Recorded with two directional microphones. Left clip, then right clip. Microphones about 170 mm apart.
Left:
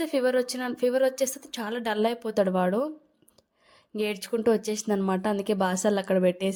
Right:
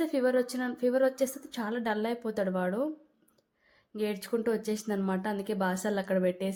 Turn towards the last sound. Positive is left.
turn(degrees=35)  # may be behind; listen again after turning